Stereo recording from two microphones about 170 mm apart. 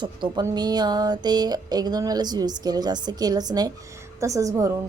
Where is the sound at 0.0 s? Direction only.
25° right (ahead or behind).